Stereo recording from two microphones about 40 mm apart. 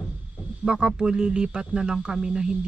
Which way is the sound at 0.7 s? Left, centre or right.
Right.